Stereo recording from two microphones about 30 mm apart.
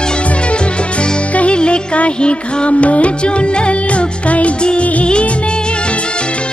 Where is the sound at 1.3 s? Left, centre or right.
Left.